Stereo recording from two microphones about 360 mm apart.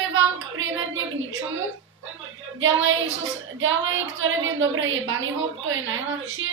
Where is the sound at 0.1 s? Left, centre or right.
Right.